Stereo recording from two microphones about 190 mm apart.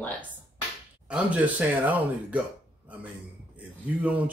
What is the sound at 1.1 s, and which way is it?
Speech, 5° right (ahead or behind).